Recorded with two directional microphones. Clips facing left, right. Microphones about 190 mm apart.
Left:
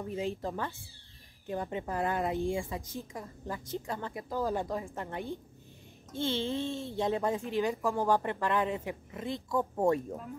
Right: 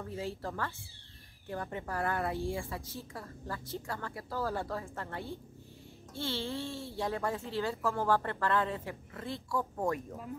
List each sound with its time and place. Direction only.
0.0 s a woman's voice: 20° left (ahead or behind)